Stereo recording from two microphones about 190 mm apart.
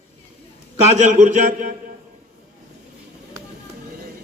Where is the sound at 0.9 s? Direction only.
40° right (ahead or behind).